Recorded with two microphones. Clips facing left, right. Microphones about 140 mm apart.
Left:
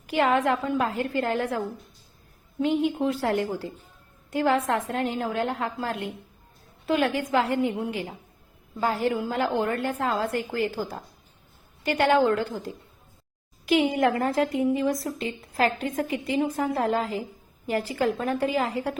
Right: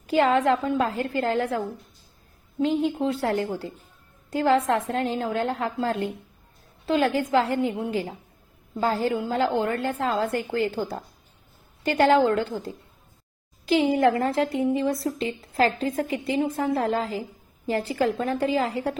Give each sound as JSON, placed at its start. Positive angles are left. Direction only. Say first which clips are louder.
{"t": 0.1, "sound": "a woman's voice", "louder": "right 2 dB", "side_deg": -30}
{"t": 4.3, "sound": "a woman's voice", "louder": "right 2 dB", "side_deg": -30}